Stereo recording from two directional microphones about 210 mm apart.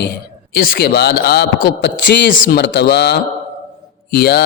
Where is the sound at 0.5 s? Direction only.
45° left (ahead or behind).